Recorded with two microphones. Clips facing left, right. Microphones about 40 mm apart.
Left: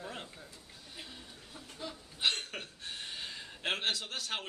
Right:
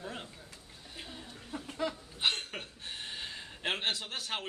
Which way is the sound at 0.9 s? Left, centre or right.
Centre.